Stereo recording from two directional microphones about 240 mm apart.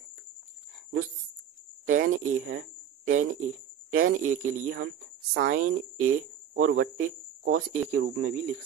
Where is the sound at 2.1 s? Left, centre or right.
Right.